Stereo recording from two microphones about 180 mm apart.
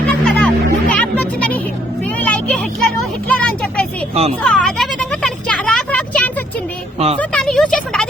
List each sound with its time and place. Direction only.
0.1 s music: 5° left (ahead or behind)
2.0 s vehicle: 10° left (ahead or behind)
4.1 s a child's voice: 35° right (ahead or behind)
4.4 s a sound: 5° left (ahead or behind)